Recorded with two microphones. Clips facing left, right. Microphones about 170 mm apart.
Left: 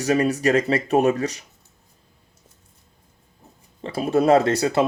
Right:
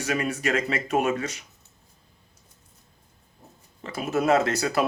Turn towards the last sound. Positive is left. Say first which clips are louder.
# left 5 dB
turn(degrees=30)  # may be behind; listen again after turning